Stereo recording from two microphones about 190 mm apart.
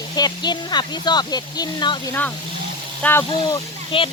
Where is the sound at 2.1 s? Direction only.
10° left (ahead or behind).